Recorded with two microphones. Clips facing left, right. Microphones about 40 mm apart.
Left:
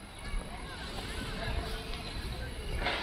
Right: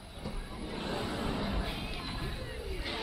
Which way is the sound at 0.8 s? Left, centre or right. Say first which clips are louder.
Right 8 dB; right.